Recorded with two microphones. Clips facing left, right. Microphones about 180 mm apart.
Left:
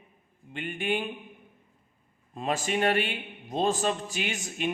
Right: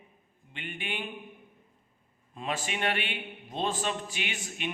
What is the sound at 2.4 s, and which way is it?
A man's voice, 40° left (ahead or behind).